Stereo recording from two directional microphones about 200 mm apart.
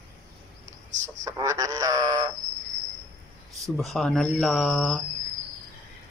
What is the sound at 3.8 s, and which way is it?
Speech, centre (ahead or behind).